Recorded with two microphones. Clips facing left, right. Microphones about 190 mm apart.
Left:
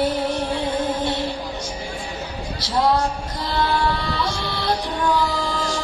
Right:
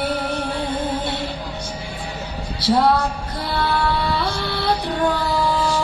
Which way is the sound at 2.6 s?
60° right (ahead or behind).